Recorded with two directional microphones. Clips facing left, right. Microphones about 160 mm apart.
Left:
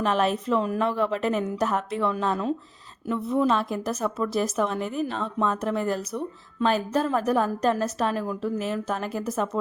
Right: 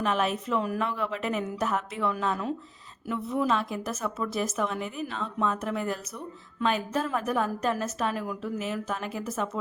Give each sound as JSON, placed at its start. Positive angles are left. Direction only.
{"t": 0.0, "sound": "a woman's voice", "side_deg": 35}